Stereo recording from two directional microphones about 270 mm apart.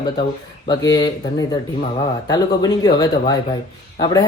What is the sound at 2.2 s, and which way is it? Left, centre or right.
Speech, centre.